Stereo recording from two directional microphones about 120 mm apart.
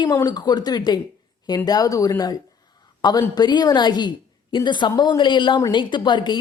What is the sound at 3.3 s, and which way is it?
Speech, 35° left (ahead or behind).